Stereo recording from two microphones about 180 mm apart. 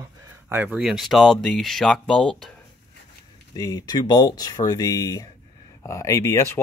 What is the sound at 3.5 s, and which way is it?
Speech, 20° left (ahead or behind).